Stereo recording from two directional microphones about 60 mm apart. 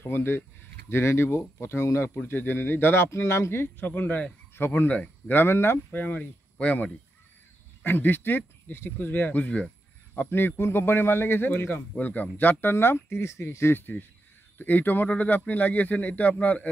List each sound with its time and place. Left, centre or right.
0.0 s a man's voice: left
2.2 s a man's voice: left
3.6 s a man's voice: left
5.4 s a man's voice: left
5.9 s a man's voice: left